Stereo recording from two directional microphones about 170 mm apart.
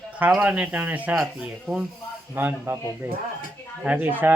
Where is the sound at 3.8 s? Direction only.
10° right (ahead or behind).